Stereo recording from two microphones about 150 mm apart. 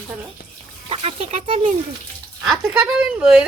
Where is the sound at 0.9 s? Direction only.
40° right (ahead or behind).